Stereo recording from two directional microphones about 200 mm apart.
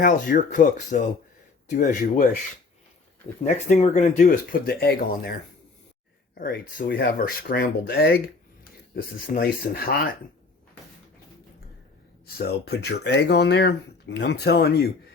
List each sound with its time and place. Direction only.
0.0 s speech: 45° left (ahead or behind)
3.4 s speech: 35° left (ahead or behind); by 5.3 s 50° left (ahead or behind)
6.4 s speech: 50° left (ahead or behind)
12.2 s speech: 50° left (ahead or behind)